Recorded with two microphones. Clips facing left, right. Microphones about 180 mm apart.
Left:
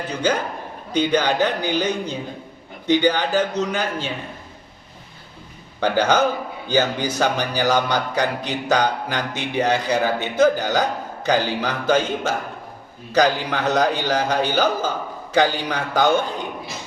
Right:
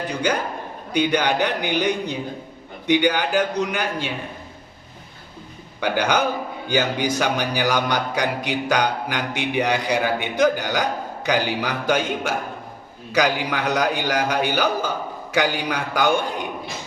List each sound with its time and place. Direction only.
0.9 s speech: 15° right (ahead or behind)
5.8 s speech: 15° right (ahead or behind)